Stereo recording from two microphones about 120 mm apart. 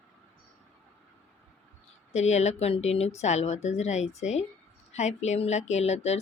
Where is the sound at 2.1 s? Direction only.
70° left (ahead or behind).